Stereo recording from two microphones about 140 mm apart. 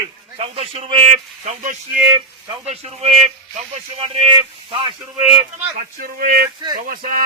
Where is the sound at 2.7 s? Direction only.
45° right (ahead or behind).